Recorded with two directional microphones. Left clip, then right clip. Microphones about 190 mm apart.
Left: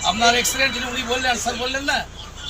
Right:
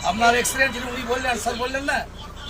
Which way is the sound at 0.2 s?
10° right (ahead or behind).